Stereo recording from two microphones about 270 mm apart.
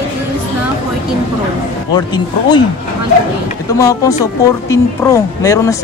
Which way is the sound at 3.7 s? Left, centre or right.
Centre.